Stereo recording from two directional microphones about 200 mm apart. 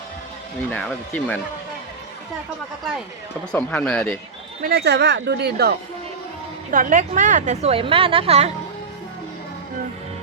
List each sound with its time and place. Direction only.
0.7 s speech: 5° left (ahead or behind)
3.5 s speech: 5° left (ahead or behind)
4.6 s speech: 55° right (ahead or behind)
6.7 s a woman's voice: 40° right (ahead or behind)